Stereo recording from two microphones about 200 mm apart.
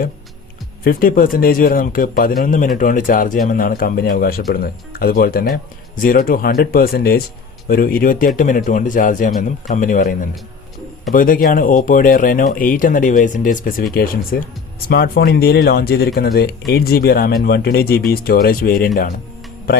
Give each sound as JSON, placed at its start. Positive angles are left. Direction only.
{"t": 0.9, "sound": "a man's voice", "side_deg": 45}